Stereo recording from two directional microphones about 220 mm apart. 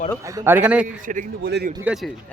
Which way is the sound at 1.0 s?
40° right (ahead or behind).